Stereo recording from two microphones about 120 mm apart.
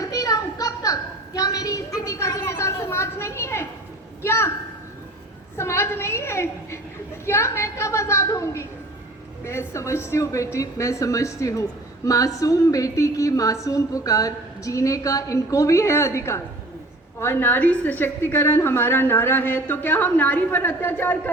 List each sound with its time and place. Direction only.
0.0 s a sound: 30° left (ahead or behind)
4.2 s a woman's voice: 20° left (ahead or behind)
5.5 s a woman's voice: 20° left (ahead or behind)